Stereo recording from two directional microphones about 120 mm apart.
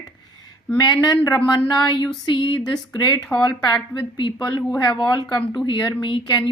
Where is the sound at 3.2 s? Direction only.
5° left (ahead or behind).